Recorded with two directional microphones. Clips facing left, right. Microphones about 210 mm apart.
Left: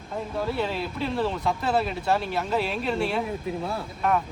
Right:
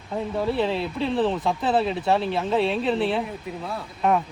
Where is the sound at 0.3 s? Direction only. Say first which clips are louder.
Right 4 dB; centre (ahead or behind).